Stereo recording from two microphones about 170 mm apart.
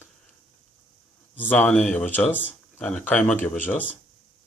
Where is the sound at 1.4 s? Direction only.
10° left (ahead or behind).